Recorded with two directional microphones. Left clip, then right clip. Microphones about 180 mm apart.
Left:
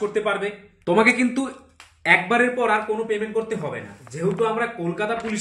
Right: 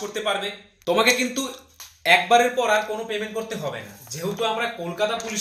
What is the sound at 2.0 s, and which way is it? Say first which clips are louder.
Speech: right 1 dB; 25° left (ahead or behind).